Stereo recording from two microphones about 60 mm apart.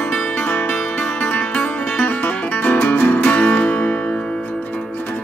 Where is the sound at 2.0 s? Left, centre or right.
Left.